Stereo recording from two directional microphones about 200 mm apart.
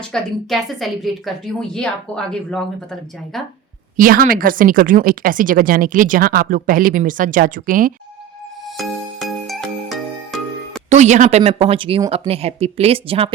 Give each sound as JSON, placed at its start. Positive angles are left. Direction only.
{"t": 0.1, "sound": "a woman's voice", "side_deg": 0}
{"t": 3.9, "sound": "speech", "side_deg": -45}
{"t": 8.8, "sound": "music", "side_deg": 0}
{"t": 10.8, "sound": "speech", "side_deg": -35}